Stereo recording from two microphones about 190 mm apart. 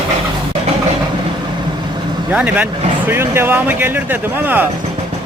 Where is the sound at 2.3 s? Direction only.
5° right (ahead or behind).